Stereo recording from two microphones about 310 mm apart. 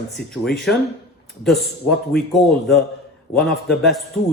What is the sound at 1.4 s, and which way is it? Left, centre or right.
Speech, centre.